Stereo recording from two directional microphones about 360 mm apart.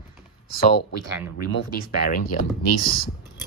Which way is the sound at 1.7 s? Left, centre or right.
Left.